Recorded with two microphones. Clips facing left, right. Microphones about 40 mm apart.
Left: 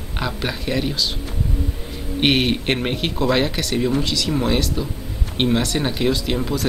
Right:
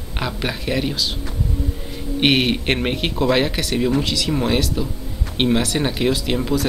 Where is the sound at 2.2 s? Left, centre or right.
Centre.